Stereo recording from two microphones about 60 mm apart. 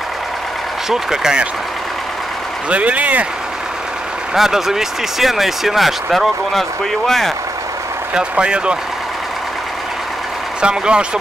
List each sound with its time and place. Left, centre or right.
0.8 s speech: centre
2.7 s speech: right
4.3 s speech: centre
8.1 s speech: centre
10.6 s speech: centre